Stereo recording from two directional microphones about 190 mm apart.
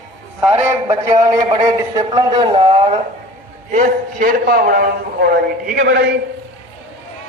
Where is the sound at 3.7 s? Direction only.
45° right (ahead or behind).